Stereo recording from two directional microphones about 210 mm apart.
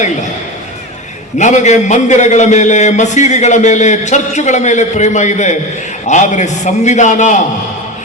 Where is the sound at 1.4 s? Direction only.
35° left (ahead or behind).